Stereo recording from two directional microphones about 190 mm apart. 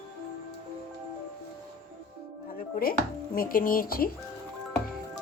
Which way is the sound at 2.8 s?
50° left (ahead or behind).